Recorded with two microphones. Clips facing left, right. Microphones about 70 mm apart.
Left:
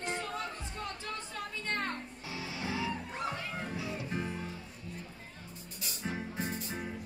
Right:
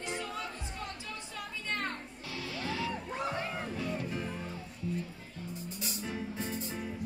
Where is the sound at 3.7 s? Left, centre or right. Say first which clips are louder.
Right 3 dB; centre.